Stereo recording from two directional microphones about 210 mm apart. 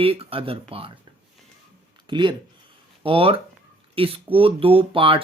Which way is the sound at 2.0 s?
20° right (ahead or behind).